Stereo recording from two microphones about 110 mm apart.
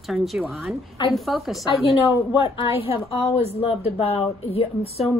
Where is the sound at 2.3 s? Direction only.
50° left (ahead or behind).